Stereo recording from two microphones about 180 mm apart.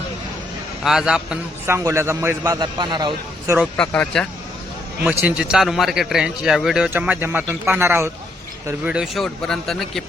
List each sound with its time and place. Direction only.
0.9 s a man's voice: 5° right (ahead or behind); by 3.6 s 20° right (ahead or behind)
3.8 s a man's voice: 5° left (ahead or behind)
5.0 s a man's voice: 5° right (ahead or behind)